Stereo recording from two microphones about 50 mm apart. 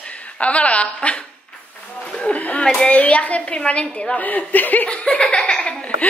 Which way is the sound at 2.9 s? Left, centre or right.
Left.